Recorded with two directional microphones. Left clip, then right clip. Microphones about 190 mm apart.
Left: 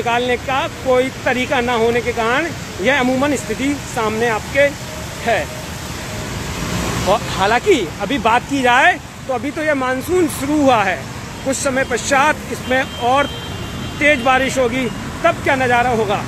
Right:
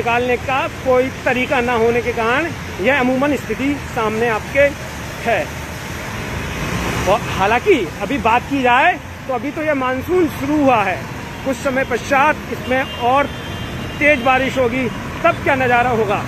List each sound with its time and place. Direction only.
0.0 s speech: 10° left (ahead or behind)
7.1 s speech: 10° left (ahead or behind)